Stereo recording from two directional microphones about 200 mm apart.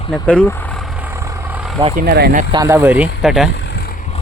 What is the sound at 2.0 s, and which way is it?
Speech, 50° right (ahead or behind).